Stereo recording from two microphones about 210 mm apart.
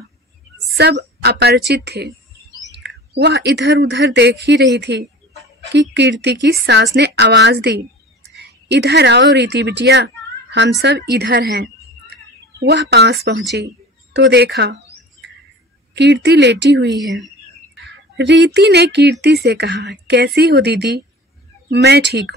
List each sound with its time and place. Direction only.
0.7 s speech: 50° right (ahead or behind)
3.2 s a woman's voice: 55° right (ahead or behind)
15.9 s speech: 55° right (ahead or behind)
17.0 s speech: centre (ahead or behind)
17.8 s speech: 55° right (ahead or behind)